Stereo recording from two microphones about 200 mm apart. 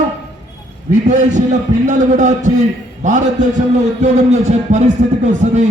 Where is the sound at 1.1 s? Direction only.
35° right (ahead or behind).